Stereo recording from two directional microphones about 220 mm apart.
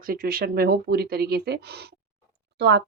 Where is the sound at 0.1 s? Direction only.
40° right (ahead or behind).